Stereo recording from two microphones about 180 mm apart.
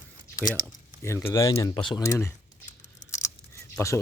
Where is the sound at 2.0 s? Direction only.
15° left (ahead or behind).